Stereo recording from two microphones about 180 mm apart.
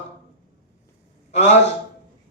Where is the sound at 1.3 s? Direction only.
40° left (ahead or behind).